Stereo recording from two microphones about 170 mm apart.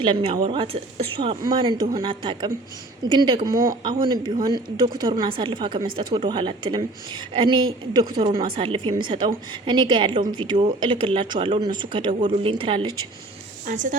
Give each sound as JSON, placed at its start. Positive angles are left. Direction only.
{"t": 0.0, "sound": "a woman's voice", "side_deg": -30}
{"t": 3.5, "sound": "speech", "side_deg": -55}
{"t": 4.0, "sound": "a woman's voice", "side_deg": -25}